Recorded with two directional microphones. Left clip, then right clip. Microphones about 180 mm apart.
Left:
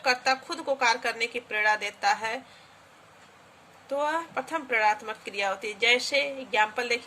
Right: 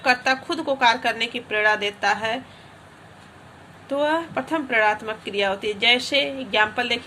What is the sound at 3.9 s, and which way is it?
A woman's voice, 15° left (ahead or behind).